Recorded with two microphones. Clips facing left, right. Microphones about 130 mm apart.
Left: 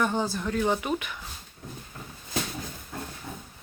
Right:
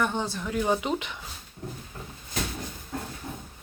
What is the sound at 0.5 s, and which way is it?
Speech, 10° right (ahead or behind).